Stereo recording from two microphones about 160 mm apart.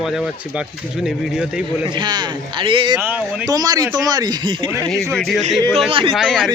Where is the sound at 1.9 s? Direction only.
25° right (ahead or behind).